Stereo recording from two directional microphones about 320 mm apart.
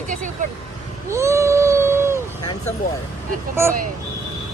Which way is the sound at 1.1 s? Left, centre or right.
Centre.